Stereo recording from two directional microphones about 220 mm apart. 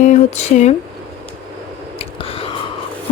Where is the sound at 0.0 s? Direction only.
35° left (ahead or behind).